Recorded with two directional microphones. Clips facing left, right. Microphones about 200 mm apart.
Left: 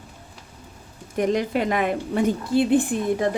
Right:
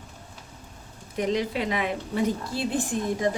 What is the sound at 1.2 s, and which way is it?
A woman's voice, 50° left (ahead or behind).